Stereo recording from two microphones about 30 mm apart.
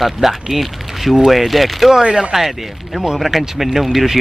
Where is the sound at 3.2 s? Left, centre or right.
Centre.